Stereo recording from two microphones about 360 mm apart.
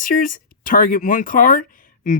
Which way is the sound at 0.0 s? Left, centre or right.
Left.